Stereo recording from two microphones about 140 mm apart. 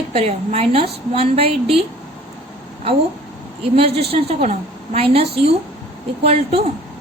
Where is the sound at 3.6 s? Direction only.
45° right (ahead or behind).